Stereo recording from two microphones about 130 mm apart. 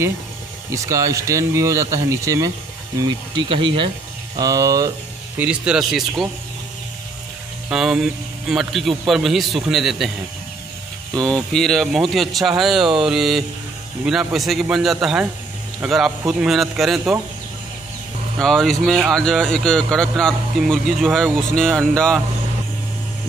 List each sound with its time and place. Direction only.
0.7 s speech: 25° right (ahead or behind)
3.0 s speech: 35° right (ahead or behind)
4.4 s speech: 25° right (ahead or behind)
5.4 s speech: 10° right (ahead or behind)
7.7 s speech: 5° right (ahead or behind)
11.1 s speech: 5° left (ahead or behind)
18.4 s speech: 5° left (ahead or behind)